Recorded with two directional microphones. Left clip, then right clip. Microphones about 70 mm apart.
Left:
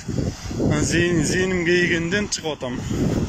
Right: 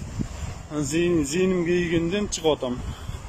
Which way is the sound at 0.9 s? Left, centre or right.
Right.